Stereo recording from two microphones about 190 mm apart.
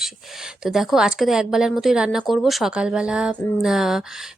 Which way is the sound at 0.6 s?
Centre (ahead or behind).